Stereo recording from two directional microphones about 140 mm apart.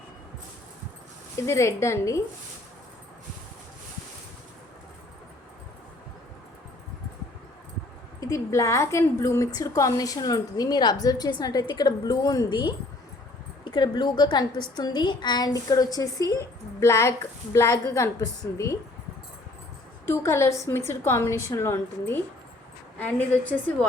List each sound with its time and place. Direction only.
1.5 s a woman's voice: 20° left (ahead or behind)
8.2 s a woman's voice: 20° left (ahead or behind)
20.1 s a woman's voice: 20° left (ahead or behind)